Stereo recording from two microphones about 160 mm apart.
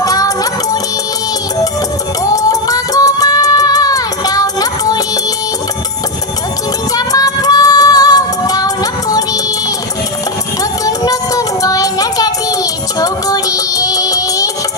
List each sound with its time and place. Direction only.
0.0 s music: 20° left (ahead or behind)
2.2 s music: 20° left (ahead or behind)
6.9 s music: 20° left (ahead or behind)